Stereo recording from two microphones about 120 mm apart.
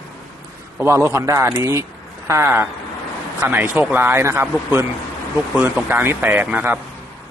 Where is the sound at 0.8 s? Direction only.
20° right (ahead or behind).